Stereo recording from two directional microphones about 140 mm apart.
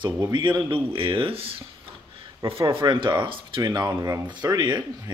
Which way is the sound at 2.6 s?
35° right (ahead or behind).